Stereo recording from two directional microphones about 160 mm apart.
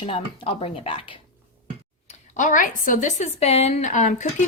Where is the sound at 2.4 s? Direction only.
55° left (ahead or behind).